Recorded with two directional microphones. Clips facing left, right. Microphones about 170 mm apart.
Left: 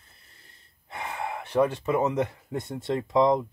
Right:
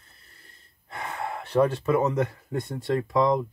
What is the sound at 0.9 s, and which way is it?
Speech, 15° left (ahead or behind).